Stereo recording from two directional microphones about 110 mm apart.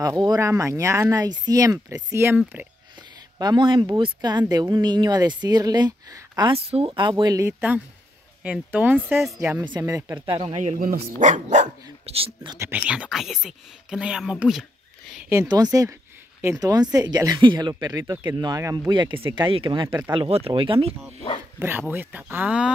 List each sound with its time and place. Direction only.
0.4 s speech: 25° right (ahead or behind)
3.3 s speech: 40° right (ahead or behind)
6.5 s speech: 60° right (ahead or behind); by 7.4 s 40° right (ahead or behind)
7.4 s speech: 15° right (ahead or behind)
9.4 s speech: 25° right (ahead or behind)
10.2 s speech: 55° right (ahead or behind)
10.5 s speech: 90° right
12.7 s speech: 10° right (ahead or behind)
14.6 s a sound: centre (ahead or behind)
15.4 s speech: 35° right (ahead or behind)
20.1 s speech: 60° right (ahead or behind)
21.5 s speech: 20° right (ahead or behind)